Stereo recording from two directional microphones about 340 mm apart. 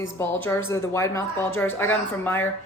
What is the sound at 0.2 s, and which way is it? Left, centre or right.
Speech, centre.